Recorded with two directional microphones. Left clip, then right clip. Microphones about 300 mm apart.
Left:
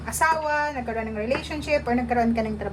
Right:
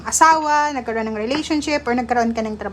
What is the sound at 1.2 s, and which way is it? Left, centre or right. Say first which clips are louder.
Speech: right 5 dB; right.